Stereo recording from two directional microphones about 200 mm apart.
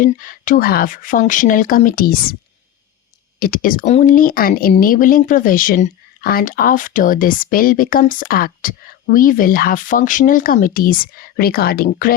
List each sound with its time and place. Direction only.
0.0 s speech: 40° left (ahead or behind)
3.4 s speech: 45° left (ahead or behind)